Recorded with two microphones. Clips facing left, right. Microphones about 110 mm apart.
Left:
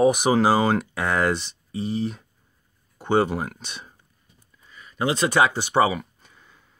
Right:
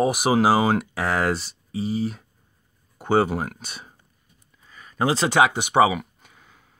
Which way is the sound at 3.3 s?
45° right (ahead or behind).